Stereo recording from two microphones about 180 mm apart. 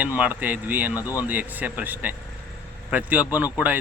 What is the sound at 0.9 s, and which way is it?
Speech, 20° left (ahead or behind).